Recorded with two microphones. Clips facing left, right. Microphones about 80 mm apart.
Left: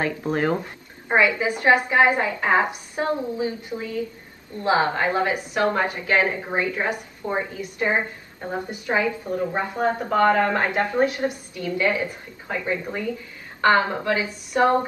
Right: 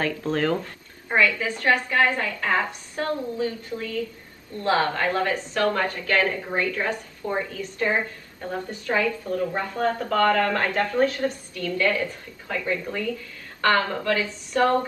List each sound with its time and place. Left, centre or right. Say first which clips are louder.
0.0 s a woman's voice: left 1 dB; left